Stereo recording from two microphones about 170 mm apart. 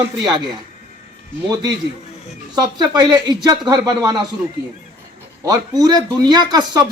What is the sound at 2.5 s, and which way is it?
A man's voice, 25° right (ahead or behind).